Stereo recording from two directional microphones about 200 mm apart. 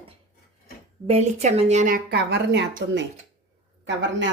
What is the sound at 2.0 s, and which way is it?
Speech, 55° right (ahead or behind).